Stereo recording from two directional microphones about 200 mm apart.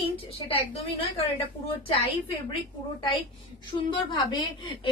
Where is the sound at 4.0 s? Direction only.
25° left (ahead or behind).